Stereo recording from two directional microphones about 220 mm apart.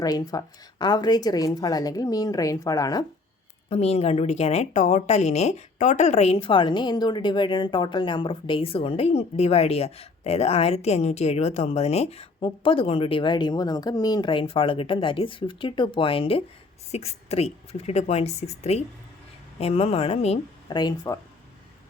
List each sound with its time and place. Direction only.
0.0 s speech: 15° left (ahead or behind)
3.7 s a woman's voice: 30° left (ahead or behind)